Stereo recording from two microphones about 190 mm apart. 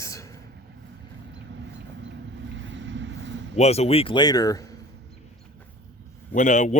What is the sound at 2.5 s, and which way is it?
Vehicle, 75° right (ahead or behind).